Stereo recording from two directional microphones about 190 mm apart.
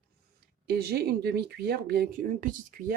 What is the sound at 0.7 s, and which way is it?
Speech, 55° right (ahead or behind).